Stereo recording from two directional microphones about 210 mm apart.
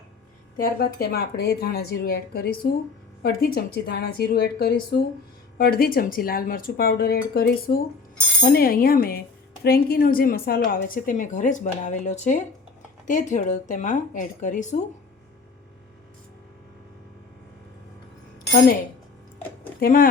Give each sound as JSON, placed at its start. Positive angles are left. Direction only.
{"t": 0.5, "sound": "a woman's voice", "side_deg": 45}
{"t": 19.8, "sound": "speech", "side_deg": 40}